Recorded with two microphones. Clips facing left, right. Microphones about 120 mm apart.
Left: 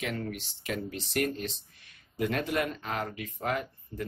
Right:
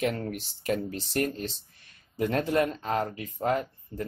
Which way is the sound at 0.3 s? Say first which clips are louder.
Right 6 dB; 40° right (ahead or behind).